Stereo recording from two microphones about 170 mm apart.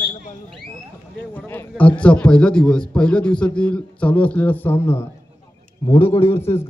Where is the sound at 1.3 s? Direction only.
10° left (ahead or behind).